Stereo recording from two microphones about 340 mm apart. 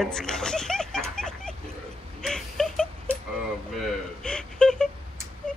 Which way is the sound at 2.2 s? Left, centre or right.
Centre.